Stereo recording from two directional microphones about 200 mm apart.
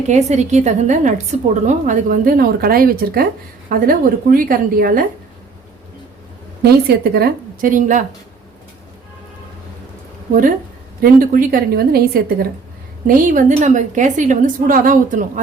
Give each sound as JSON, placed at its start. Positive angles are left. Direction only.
{"t": 0.1, "sound": "a woman's voice", "side_deg": -35}
{"t": 6.6, "sound": "a woman's voice", "side_deg": -50}
{"t": 11.0, "sound": "a woman's voice", "side_deg": -45}